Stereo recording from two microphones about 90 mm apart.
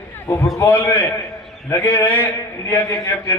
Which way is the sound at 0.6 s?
25° left (ahead or behind).